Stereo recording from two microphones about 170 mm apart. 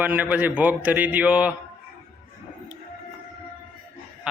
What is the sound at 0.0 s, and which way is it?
A man's voice, 10° right (ahead or behind).